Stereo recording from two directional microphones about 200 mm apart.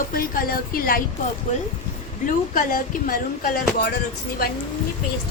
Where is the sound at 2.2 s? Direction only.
45° left (ahead or behind).